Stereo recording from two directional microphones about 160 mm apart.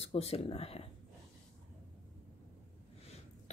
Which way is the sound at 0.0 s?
40° left (ahead or behind).